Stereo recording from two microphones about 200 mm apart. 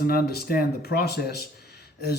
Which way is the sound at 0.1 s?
50° left (ahead or behind).